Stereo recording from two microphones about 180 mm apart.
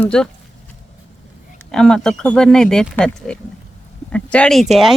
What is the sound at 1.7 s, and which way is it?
Speech, 5° left (ahead or behind).